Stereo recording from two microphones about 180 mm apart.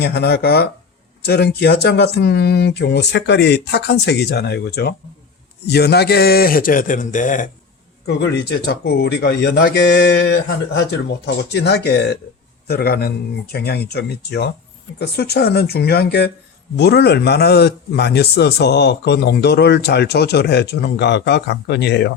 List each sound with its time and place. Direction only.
0.0 s a man's voice: 65° left (ahead or behind); by 7.5 s 45° left (ahead or behind)
8.0 s a man's voice: 70° left (ahead or behind)